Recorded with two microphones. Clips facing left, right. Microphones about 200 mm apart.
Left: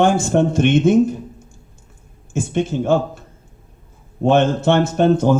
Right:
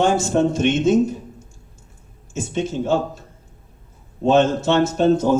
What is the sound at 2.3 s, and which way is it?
Speech, 55° left (ahead or behind).